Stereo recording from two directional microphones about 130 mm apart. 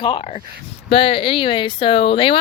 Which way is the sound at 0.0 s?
40° left (ahead or behind).